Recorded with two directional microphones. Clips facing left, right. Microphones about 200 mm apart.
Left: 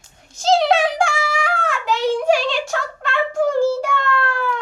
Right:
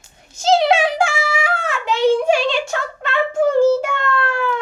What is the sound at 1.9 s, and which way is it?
Speech, 25° right (ahead or behind).